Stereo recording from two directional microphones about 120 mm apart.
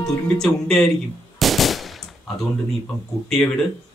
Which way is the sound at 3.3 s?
5° left (ahead or behind).